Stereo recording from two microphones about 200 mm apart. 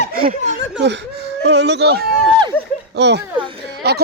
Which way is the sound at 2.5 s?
10° left (ahead or behind).